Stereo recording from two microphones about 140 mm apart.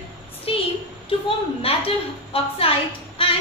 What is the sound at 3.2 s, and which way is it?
Music, 40° left (ahead or behind).